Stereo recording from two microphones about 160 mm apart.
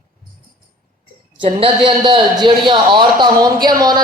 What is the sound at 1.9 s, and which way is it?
A man's voice, 30° right (ahead or behind).